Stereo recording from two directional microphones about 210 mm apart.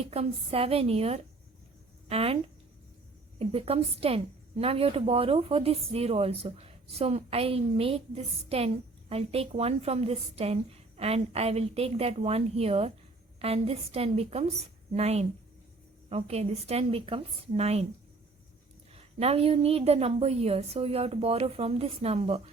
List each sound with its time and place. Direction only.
0.0 s a woman's voice: 30° right (ahead or behind)
19.2 s a woman's voice: 30° right (ahead or behind)